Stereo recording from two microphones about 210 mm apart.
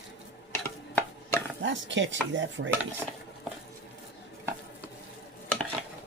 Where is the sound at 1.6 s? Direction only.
60° right (ahead or behind).